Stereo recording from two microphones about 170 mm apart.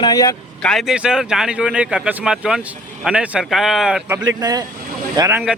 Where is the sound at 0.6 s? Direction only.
5° left (ahead or behind).